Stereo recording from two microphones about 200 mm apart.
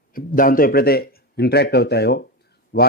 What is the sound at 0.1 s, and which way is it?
A man's voice, 45° left (ahead or behind).